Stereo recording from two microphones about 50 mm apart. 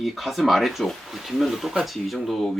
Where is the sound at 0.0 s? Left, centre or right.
Centre.